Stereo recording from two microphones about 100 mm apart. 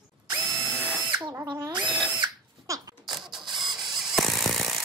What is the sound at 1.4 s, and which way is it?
Drill, 45° right (ahead or behind).